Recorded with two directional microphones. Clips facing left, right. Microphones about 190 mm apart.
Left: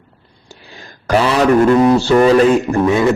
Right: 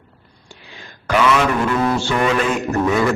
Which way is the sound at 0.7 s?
40° left (ahead or behind).